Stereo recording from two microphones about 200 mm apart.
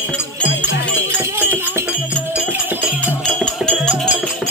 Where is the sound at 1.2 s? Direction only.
10° right (ahead or behind).